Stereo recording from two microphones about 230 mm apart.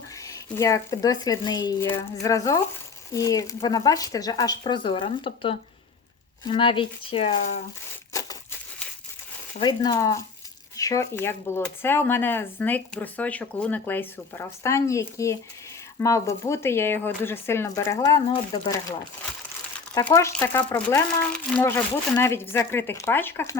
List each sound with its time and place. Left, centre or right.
0.3 s speech: centre
9.6 s speech: centre